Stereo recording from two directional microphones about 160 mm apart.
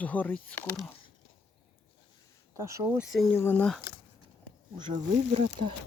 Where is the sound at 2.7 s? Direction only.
15° right (ahead or behind).